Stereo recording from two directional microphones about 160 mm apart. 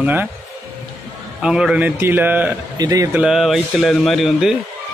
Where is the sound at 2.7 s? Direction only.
25° right (ahead or behind).